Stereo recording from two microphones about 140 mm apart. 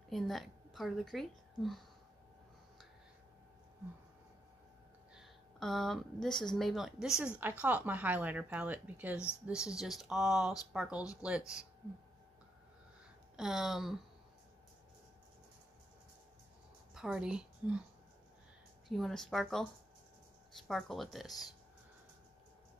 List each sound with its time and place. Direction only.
0.1 s a woman's voice: centre (ahead or behind)
5.1 s speech: centre (ahead or behind)
13.4 s speech: centre (ahead or behind)
16.9 s a woman's voice: 5° right (ahead or behind)
18.9 s speech: centre (ahead or behind)